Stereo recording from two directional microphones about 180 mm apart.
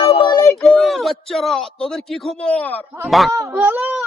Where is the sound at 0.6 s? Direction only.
Centre (ahead or behind).